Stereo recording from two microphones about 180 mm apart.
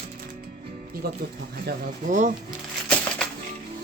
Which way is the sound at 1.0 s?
60° right (ahead or behind).